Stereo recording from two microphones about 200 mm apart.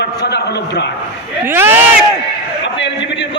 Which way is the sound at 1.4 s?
10° right (ahead or behind).